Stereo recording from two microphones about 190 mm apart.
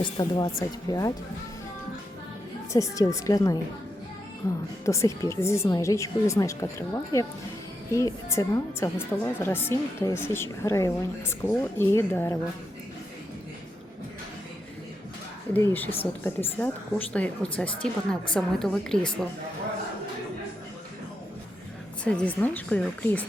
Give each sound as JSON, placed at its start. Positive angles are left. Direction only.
{"t": 0.0, "sound": "speech", "side_deg": 20}
{"t": 2.7, "sound": "a woman's voice", "side_deg": 15}
{"t": 15.5, "sound": "a woman's voice", "side_deg": 10}
{"t": 22.0, "sound": "a woman's voice", "side_deg": 5}